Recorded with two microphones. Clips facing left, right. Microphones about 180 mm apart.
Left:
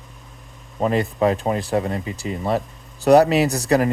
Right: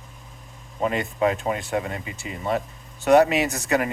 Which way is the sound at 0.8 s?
35° left (ahead or behind).